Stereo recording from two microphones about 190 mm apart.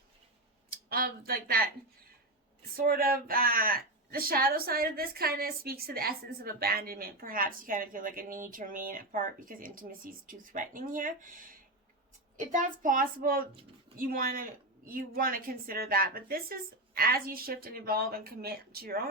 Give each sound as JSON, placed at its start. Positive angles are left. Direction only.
{"t": 0.9, "sound": "speech", "side_deg": -50}
{"t": 2.7, "sound": "speech", "side_deg": -50}